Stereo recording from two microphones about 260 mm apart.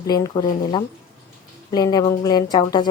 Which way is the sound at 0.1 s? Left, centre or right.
Centre.